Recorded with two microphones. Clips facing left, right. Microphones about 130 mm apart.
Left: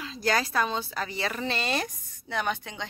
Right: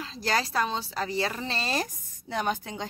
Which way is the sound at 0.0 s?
30° right (ahead or behind).